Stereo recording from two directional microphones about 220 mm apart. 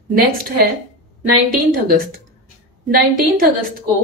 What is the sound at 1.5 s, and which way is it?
A woman's voice, 40° right (ahead or behind).